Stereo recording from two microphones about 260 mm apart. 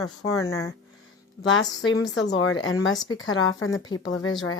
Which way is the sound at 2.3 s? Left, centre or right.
Left.